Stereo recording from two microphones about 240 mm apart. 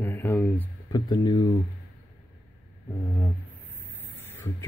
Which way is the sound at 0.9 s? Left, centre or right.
Centre.